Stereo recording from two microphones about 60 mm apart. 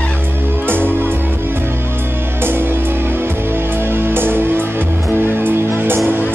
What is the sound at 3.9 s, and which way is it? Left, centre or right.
Music, right.